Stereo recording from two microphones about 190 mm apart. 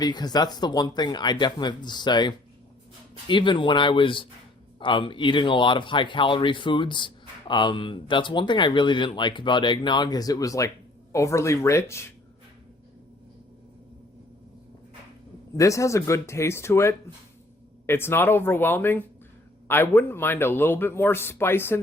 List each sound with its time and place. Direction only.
0.0 s a man's voice: 20° left (ahead or behind)
15.5 s a man's voice: 15° left (ahead or behind)